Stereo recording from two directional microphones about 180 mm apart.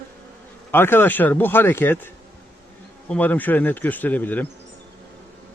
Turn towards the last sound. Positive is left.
turn(degrees=10)  # may be behind; listen again after turning